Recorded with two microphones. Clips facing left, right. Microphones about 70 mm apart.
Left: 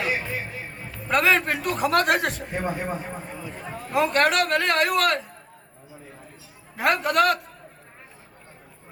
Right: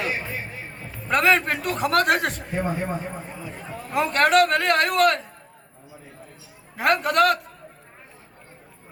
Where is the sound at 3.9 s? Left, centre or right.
Centre.